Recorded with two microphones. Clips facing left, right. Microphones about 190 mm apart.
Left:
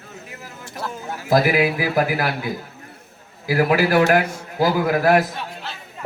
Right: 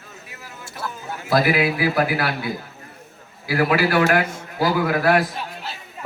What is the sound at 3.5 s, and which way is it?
A man's voice, 40° left (ahead or behind).